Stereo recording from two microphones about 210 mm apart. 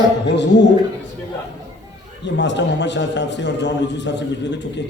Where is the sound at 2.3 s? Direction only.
55° left (ahead or behind).